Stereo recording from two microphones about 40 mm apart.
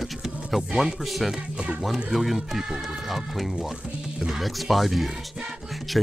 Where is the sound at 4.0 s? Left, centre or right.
Centre.